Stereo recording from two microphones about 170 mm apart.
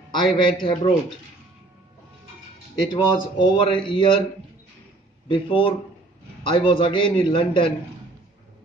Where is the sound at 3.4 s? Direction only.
30° left (ahead or behind).